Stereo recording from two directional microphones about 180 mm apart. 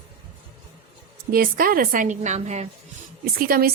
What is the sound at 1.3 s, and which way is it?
Speech, 55° right (ahead or behind).